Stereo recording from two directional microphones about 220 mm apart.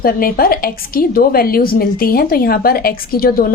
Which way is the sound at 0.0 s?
40° left (ahead or behind).